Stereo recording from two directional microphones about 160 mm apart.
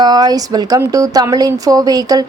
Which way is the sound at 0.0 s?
25° right (ahead or behind).